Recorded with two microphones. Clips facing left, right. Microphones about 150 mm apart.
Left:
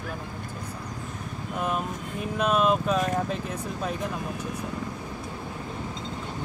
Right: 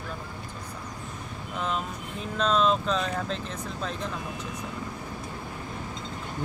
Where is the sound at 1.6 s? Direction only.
10° left (ahead or behind).